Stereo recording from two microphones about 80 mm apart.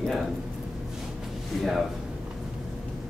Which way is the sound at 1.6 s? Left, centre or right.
Centre.